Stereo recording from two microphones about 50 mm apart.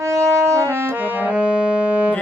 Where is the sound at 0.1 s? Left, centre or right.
Right.